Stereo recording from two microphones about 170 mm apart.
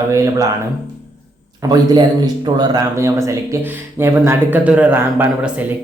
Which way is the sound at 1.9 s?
25° right (ahead or behind).